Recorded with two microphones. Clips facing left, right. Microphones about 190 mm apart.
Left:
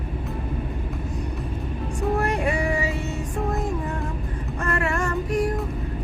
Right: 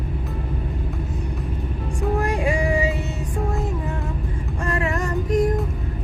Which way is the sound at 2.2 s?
10° right (ahead or behind).